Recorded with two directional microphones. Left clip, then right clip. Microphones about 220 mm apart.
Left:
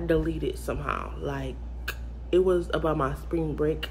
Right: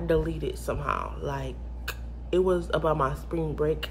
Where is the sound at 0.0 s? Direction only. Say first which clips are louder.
Even; 10° right (ahead or behind).